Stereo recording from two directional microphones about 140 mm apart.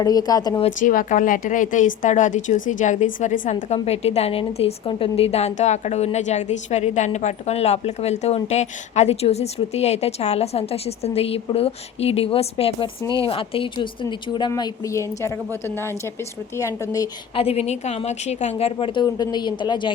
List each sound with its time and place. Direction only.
0.0 s speech: 25° left (ahead or behind)
0.8 s a woman's voice: 70° left (ahead or behind); by 17.1 s 25° left (ahead or behind)
17.3 s a woman's voice: 45° left (ahead or behind)